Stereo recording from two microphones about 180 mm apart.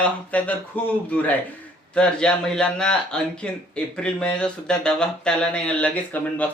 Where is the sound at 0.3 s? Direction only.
10° left (ahead or behind).